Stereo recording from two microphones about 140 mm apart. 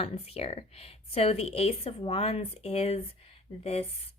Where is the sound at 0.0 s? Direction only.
45° left (ahead or behind).